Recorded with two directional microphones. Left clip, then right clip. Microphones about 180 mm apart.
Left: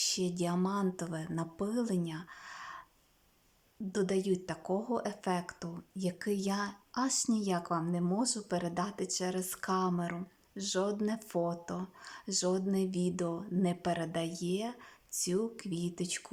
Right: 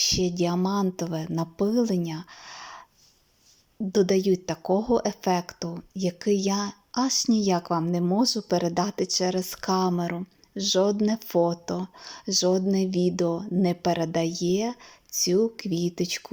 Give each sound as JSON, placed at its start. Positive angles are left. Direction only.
{"t": 0.0, "sound": "speech", "side_deg": -15}
{"t": 3.9, "sound": "a woman's voice", "side_deg": -20}